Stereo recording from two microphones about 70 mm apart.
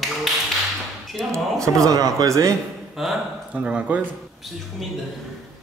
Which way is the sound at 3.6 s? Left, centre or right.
Centre.